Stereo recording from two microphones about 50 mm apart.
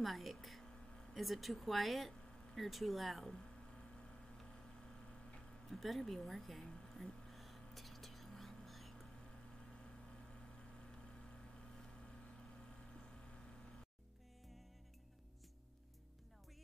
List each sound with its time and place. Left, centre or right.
0.0 s a sound: centre
1.1 s speech: centre
3.3 s a sound: centre
5.7 s speech: centre
6.7 s whispering: centre
12.9 s vehicle: centre